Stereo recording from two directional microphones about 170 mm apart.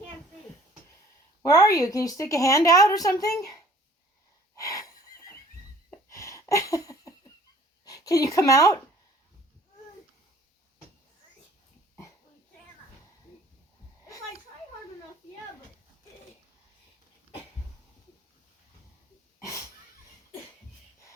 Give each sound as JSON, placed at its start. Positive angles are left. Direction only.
{"t": 1.4, "sound": "a woman's voice", "side_deg": 20}
{"t": 4.5, "sound": "wheeze", "side_deg": 20}
{"t": 6.1, "sound": "a sound", "side_deg": 15}
{"t": 7.9, "sound": "speech", "side_deg": 20}
{"t": 19.4, "sound": "sneeze", "side_deg": 20}